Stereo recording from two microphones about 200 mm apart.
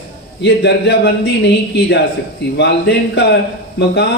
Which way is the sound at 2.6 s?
55° left (ahead or behind).